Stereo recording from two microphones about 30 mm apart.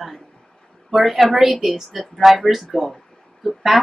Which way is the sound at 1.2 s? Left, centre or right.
Centre.